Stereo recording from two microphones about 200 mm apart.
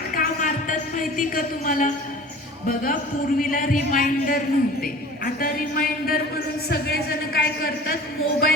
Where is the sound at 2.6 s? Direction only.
45° left (ahead or behind).